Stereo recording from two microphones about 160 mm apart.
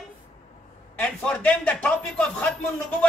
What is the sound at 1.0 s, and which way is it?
Speech, 10° left (ahead or behind).